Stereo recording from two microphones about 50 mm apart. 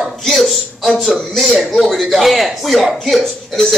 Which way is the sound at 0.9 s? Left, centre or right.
Centre.